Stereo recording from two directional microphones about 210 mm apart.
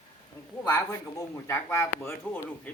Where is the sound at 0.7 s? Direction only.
15° left (ahead or behind).